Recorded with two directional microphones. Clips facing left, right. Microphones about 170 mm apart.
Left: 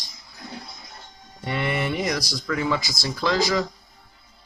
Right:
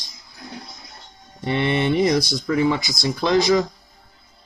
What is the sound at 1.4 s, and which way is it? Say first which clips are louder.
Speech: right 5 dB; 25° right (ahead or behind).